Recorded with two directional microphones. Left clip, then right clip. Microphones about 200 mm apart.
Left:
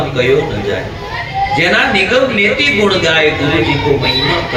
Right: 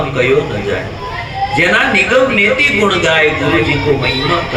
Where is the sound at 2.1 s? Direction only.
30° right (ahead or behind).